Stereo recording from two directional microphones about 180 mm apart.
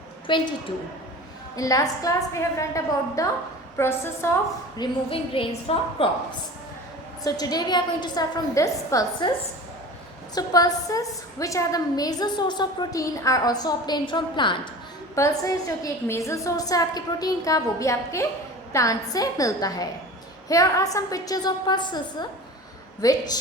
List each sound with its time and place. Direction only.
0.3 s a woman's voice: 25° left (ahead or behind)
1.5 s a woman's voice: 20° left (ahead or behind)
4.8 s a woman's voice: 30° left (ahead or behind)
7.3 s a woman's voice: 20° left (ahead or behind)
10.3 s a woman's voice: 20° left (ahead or behind)